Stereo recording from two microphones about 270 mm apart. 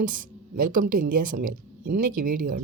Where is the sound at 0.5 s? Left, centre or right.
Right.